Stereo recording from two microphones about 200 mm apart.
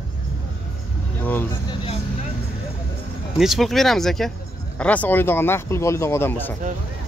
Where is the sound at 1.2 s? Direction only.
10° left (ahead or behind).